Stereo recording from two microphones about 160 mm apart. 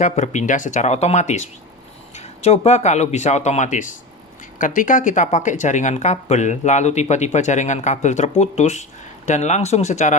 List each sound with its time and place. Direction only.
0.0 s speech: 50° left (ahead or behind)